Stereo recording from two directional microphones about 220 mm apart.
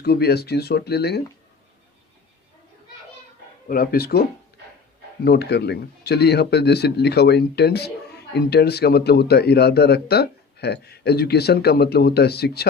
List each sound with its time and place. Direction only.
0.0 s speech: 45° left (ahead or behind)
3.7 s speech: 45° left (ahead or behind)
5.2 s speech: 50° left (ahead or behind)